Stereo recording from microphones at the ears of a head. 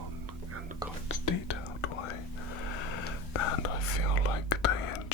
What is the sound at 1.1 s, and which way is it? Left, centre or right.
Whispering, left.